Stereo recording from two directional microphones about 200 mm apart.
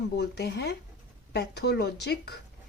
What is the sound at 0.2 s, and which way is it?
A woman's voice, 55° left (ahead or behind).